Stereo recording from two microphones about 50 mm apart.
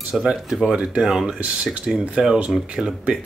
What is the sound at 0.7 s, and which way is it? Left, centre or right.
Speech, right.